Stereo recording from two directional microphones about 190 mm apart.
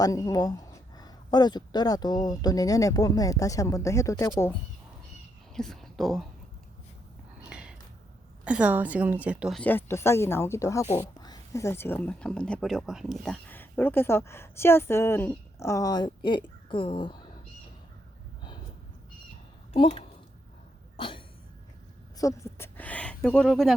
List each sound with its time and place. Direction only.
0.0 s speech: 20° left (ahead or behind)
5.5 s speech: centre (ahead or behind)
7.4 s a sound: 5° right (ahead or behind)
8.4 s a woman's voice: 5° right (ahead or behind); by 17.2 s 25° left (ahead or behind)
19.7 s speech: 30° left (ahead or behind)
20.9 s cough: 25° left (ahead or behind)
22.2 s speech: 15° left (ahead or behind)